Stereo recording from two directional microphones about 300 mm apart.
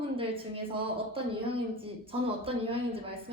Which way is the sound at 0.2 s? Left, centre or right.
Centre.